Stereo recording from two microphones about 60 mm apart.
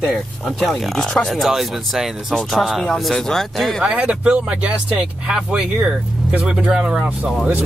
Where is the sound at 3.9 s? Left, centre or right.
Centre.